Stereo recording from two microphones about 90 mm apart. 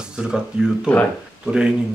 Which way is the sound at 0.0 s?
10° right (ahead or behind).